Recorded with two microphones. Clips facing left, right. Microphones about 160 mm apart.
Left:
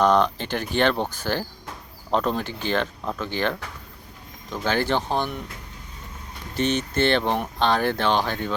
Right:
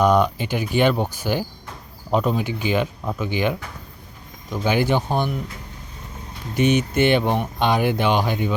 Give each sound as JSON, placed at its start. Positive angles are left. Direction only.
{"t": 0.0, "sound": "speech", "side_deg": -10}
{"t": 6.5, "sound": "speech", "side_deg": -10}